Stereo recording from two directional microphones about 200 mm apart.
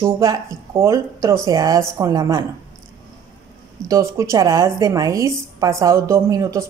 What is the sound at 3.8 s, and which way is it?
A woman's voice, 15° right (ahead or behind).